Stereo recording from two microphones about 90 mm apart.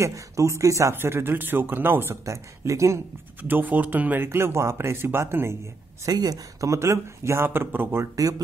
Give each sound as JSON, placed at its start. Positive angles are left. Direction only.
{"t": 0.0, "sound": "speech", "side_deg": -35}
{"t": 3.4, "sound": "speech", "side_deg": -20}
{"t": 6.0, "sound": "speech", "side_deg": -45}